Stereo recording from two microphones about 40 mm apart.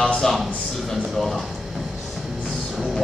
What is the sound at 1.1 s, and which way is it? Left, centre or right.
Speech, centre.